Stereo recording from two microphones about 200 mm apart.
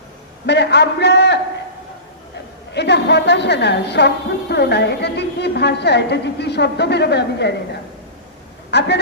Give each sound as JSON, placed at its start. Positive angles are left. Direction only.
{"t": 0.4, "sound": "a woman's voice", "side_deg": 55}
{"t": 2.7, "sound": "a woman's voice", "side_deg": 60}
{"t": 8.7, "sound": "a woman's voice", "side_deg": 60}